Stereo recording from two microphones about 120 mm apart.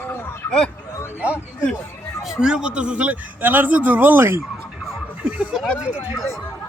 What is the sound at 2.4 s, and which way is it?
A man's voice, 5° right (ahead or behind).